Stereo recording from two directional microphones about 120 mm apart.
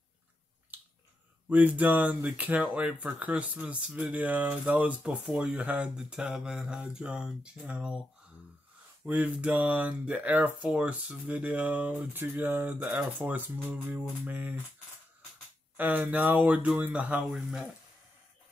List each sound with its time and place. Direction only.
0.7 s finger snapping: 15° right (ahead or behind)
1.5 s speech: 15° right (ahead or behind)
9.0 s speech: 10° right (ahead or behind)
15.7 s speech: 15° right (ahead or behind)